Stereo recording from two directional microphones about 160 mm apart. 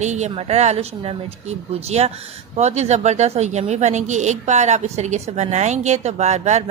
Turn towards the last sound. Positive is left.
turn(degrees=-45)  # may be behind; listen again after turning